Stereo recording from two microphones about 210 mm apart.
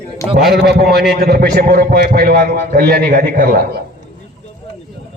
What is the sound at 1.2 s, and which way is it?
A man's voice, 50° right (ahead or behind).